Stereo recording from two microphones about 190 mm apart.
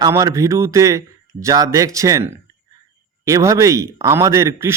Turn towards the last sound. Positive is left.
turn(degrees=-15)  # may be behind; listen again after turning